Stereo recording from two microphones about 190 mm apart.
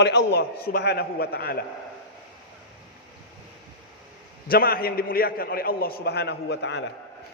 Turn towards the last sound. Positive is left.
turn(degrees=65)  # may be behind; listen again after turning